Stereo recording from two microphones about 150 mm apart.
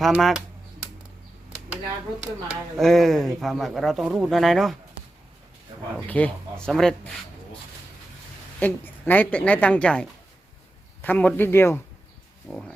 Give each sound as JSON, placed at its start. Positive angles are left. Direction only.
{"t": 0.0, "sound": "speech", "side_deg": 0}
{"t": 2.5, "sound": "speech", "side_deg": 0}
{"t": 6.1, "sound": "a woman's voice", "side_deg": 10}
{"t": 8.5, "sound": "a woman's voice", "side_deg": 10}
{"t": 12.5, "sound": "speech", "side_deg": 0}